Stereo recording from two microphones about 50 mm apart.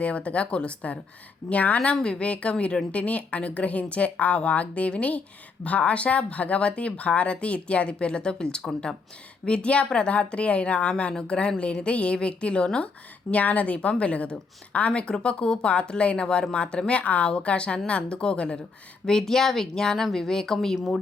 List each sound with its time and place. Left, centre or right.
0.0 s a woman's voice: left
13.3 s a woman's voice: left; by 20.7 s centre